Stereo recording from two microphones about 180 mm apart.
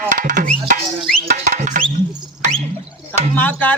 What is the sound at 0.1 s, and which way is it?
Music, 45° right (ahead or behind).